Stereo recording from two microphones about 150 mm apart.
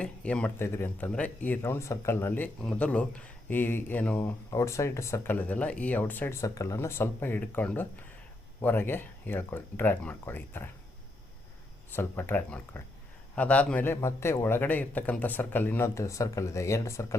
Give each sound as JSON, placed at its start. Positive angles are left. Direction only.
{"t": 0.0, "sound": "speech", "side_deg": 5}
{"t": 11.9, "sound": "speech", "side_deg": 15}